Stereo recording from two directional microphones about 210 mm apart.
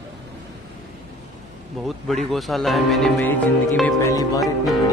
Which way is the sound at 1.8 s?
Centre (ahead or behind).